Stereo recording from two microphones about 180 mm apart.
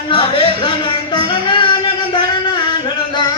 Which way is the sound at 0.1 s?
30° left (ahead or behind).